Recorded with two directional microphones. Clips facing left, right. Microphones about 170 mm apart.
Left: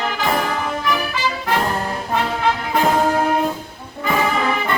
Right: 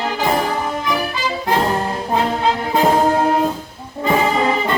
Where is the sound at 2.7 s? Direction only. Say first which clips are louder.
Right 3 dB; 25° right (ahead or behind).